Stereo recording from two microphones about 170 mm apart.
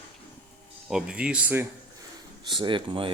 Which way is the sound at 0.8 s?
5° right (ahead or behind).